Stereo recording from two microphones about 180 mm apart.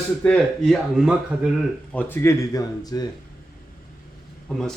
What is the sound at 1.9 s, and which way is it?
Speech, 10° left (ahead or behind).